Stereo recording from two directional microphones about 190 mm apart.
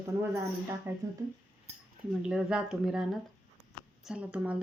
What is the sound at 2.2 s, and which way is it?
Speech, 5° right (ahead or behind).